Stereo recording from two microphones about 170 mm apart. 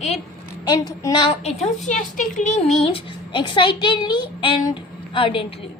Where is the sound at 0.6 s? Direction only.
25° left (ahead or behind).